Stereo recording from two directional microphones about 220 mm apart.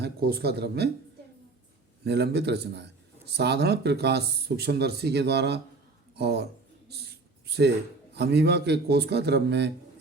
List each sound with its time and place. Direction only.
0.0 s speech: 45° right (ahead or behind)
2.0 s speech: 50° right (ahead or behind)
6.1 s a sound: 45° right (ahead or behind)
8.1 s speech: 50° right (ahead or behind)